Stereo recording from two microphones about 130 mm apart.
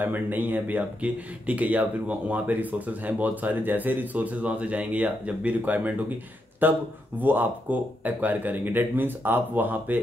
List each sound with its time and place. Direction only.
0.0 s speech: 15° right (ahead or behind)